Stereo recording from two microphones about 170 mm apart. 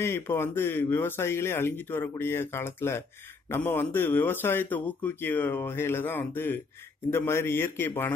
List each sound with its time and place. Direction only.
0.0 s speech: 15° left (ahead or behind)